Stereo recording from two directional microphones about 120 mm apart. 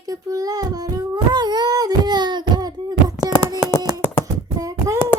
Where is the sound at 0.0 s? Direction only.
30° right (ahead or behind).